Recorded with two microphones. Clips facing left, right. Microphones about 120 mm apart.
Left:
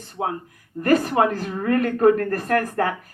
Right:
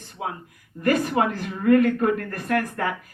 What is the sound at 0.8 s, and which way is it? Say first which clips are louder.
A woman's voice: left 3 dB; 45° left (ahead or behind).